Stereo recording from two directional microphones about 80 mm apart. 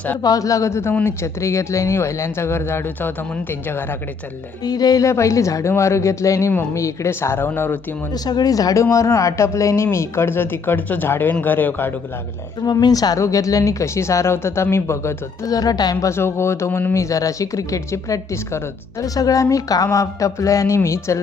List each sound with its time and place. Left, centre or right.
0.2 s a woman's voice: left
4.6 s speech: left
5.0 s speech: left
8.1 s speech: left
12.8 s speech: left
15.4 s speech: left
16.0 s speech: left